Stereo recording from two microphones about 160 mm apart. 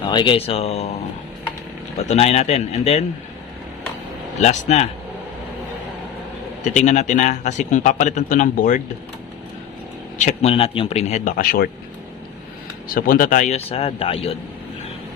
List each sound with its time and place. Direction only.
0.0 s speech: 30° left (ahead or behind)
2.0 s speech: 40° left (ahead or behind)
4.4 s a man's voice: 45° left (ahead or behind)
6.7 s a man's voice: 45° left (ahead or behind)
10.2 s speech: 45° left (ahead or behind)
11.3 s speech: 70° left (ahead or behind)
12.9 s a man's voice: 60° left (ahead or behind); by 14.3 s 35° left (ahead or behind)